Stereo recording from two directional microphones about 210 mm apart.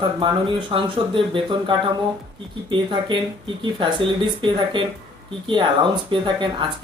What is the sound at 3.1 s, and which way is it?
Speech, 25° right (ahead or behind).